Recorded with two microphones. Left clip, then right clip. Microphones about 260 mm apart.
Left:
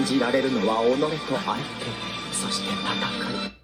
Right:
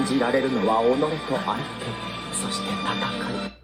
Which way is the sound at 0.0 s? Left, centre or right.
Centre.